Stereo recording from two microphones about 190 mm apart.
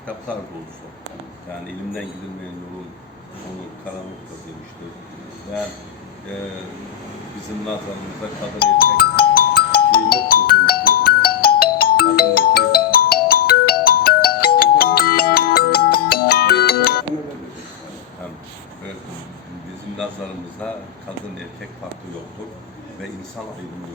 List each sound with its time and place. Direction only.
8.8 s music: 50° left (ahead or behind)
11.8 s ringtone: 55° left (ahead or behind)